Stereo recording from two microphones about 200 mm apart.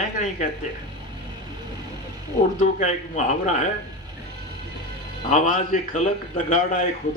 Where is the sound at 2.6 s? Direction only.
40° left (ahead or behind).